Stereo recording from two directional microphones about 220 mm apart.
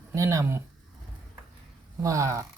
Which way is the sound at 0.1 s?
15° right (ahead or behind).